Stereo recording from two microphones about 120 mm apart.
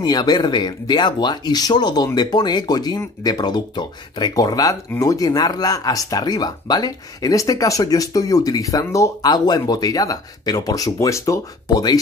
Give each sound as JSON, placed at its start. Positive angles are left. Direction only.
{"t": 0.0, "sound": "speech", "side_deg": 35}